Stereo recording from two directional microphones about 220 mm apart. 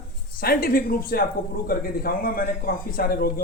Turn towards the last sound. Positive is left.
turn(degrees=45)  # may be behind; listen again after turning